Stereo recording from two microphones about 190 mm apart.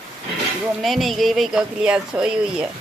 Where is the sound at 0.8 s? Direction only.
Centre (ahead or behind).